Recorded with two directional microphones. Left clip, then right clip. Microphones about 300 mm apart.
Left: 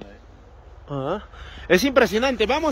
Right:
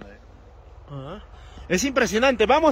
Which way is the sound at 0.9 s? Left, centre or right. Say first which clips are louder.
Left 11 dB; left.